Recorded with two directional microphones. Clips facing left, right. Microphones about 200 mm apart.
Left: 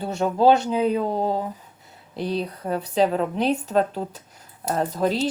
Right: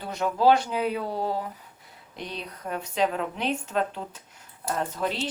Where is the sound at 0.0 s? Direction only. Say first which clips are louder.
Left 4 dB; 30° left (ahead or behind).